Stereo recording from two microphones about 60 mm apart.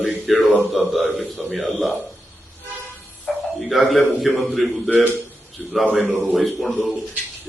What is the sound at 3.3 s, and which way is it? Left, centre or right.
Music, centre.